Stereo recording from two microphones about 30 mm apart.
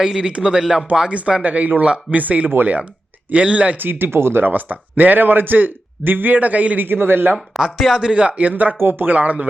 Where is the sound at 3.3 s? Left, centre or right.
Right.